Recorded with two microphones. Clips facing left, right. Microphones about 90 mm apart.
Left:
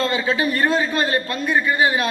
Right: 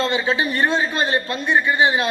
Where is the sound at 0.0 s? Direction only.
25° right (ahead or behind).